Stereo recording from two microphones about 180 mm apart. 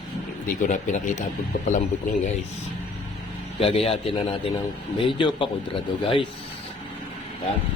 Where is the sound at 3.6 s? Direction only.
30° left (ahead or behind).